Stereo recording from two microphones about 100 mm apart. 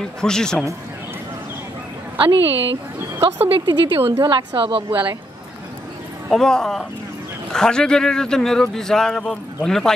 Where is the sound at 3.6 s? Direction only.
55° right (ahead or behind).